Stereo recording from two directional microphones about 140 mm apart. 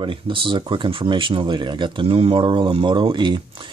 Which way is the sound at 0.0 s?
35° right (ahead or behind).